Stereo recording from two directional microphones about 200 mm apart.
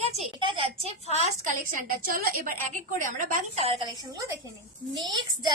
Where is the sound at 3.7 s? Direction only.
20° right (ahead or behind).